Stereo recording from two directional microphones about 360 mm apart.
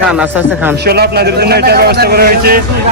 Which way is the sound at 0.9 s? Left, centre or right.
Right.